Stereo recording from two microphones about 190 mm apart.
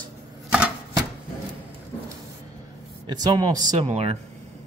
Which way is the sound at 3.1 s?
20° right (ahead or behind).